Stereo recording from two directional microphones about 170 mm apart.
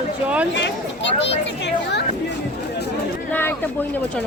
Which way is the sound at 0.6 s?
90° left.